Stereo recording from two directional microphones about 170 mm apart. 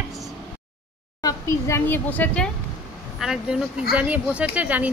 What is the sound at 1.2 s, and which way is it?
A child's voice, 20° left (ahead or behind).